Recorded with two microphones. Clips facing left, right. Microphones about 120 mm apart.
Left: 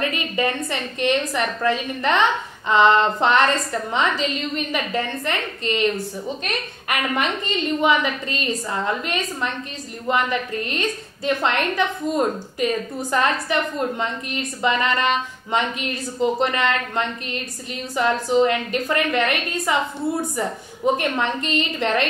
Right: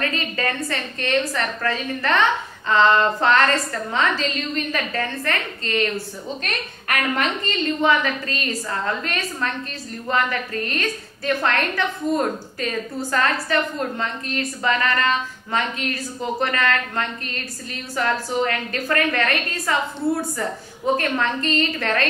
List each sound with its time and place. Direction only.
0.0 s a woman's voice: 20° left (ahead or behind)